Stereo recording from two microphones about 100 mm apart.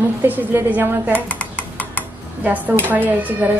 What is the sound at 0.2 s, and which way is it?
Speech, 20° right (ahead or behind).